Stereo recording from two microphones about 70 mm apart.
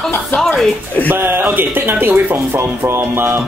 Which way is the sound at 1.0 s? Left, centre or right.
Right.